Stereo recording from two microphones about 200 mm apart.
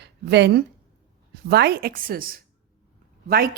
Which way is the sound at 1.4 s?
55° right (ahead or behind).